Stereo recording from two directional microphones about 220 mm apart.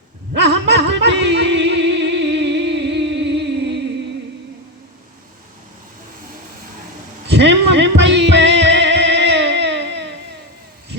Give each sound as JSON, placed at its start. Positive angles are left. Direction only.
{"t": 0.3, "sound": "a sound", "side_deg": -50}
{"t": 0.9, "sound": "music", "side_deg": -50}
{"t": 7.3, "sound": "music", "side_deg": -55}